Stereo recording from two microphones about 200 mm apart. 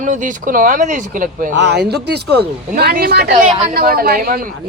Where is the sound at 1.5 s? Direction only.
60° right (ahead or behind).